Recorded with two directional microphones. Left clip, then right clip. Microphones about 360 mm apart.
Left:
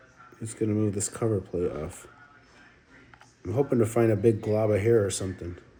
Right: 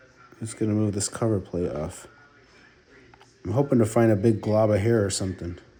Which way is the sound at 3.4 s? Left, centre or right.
Right.